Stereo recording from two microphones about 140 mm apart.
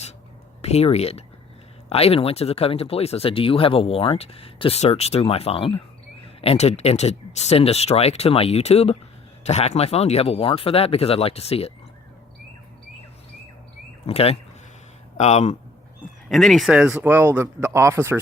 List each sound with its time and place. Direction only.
0.6 s speech: 45° left (ahead or behind)
14.1 s speech: 45° left (ahead or behind)
16.3 s speech: centre (ahead or behind); by 18.2 s 20° right (ahead or behind)